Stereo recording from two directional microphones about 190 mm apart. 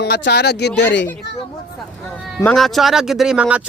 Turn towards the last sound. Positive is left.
turn(degrees=-5)  # may be behind; listen again after turning